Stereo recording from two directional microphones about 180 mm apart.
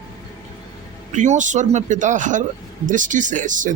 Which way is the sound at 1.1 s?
45° right (ahead or behind).